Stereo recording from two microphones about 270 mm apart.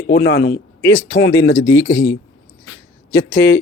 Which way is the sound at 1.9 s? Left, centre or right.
Centre.